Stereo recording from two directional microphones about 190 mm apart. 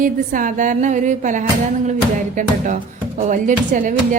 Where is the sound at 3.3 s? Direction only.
40° right (ahead or behind).